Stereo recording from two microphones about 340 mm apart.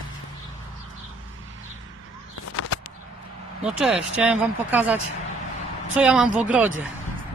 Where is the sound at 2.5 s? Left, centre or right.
Left.